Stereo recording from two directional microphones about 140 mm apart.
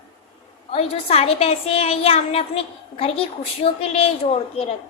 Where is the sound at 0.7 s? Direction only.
45° left (ahead or behind).